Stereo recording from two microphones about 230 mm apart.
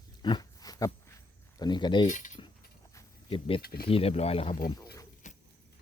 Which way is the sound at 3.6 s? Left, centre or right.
Left.